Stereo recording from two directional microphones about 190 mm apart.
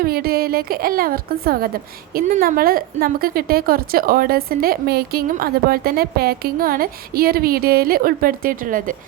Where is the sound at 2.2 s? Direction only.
50° right (ahead or behind).